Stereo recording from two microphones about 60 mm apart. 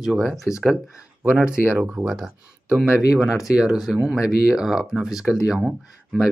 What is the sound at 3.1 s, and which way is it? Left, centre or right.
Speech, centre.